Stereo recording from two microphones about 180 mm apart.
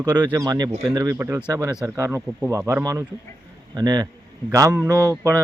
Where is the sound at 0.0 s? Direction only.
25° right (ahead or behind).